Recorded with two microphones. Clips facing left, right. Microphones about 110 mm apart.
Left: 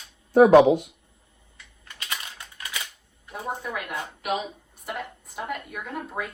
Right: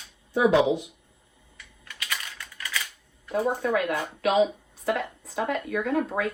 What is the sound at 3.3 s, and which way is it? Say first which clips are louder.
A woman's voice: right 7 dB; 85° right.